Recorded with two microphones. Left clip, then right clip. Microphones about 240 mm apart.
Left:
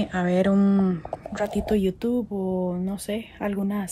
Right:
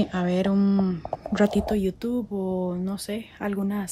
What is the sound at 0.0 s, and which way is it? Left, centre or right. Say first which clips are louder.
Speech: left 2 dB; centre.